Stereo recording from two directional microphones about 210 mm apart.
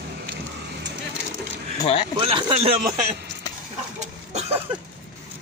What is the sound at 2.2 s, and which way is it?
Speech, 25° right (ahead or behind).